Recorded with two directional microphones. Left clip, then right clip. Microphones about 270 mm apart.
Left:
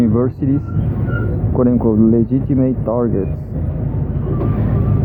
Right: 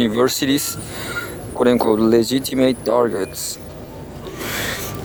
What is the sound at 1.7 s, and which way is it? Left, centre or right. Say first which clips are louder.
Speech: right 2 dB; right.